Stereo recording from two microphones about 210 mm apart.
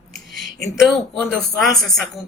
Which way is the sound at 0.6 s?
Centre (ahead or behind).